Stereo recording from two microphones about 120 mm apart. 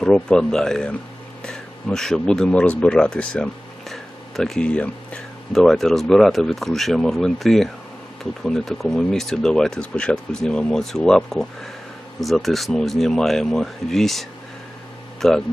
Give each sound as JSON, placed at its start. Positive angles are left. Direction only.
{"t": 0.0, "sound": "speech", "side_deg": 5}